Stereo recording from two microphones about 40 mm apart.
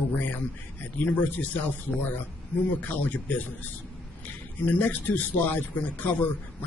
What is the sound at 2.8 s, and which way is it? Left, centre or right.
Speech, left.